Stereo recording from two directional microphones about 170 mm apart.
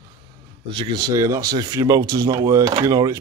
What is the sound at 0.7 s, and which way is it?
A man's voice, 25° right (ahead or behind).